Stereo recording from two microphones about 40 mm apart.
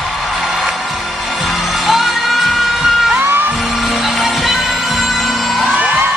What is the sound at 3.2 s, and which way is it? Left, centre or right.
Music, right.